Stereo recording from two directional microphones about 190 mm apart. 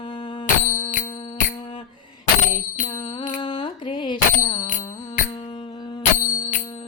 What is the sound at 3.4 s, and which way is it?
Bicycle bell, 25° left (ahead or behind).